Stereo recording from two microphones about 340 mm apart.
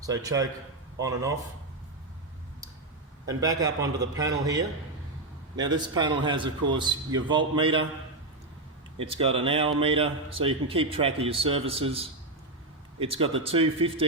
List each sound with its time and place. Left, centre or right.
0.0 s a man's voice: centre
3.2 s a man's voice: centre
9.0 s a man's voice: centre
13.0 s a man's voice: centre